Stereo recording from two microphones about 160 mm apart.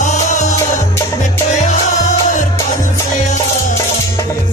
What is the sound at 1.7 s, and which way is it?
Music, 50° left (ahead or behind).